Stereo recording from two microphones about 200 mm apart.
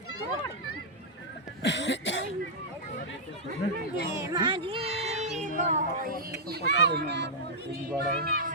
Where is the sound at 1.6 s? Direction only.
65° left (ahead or behind).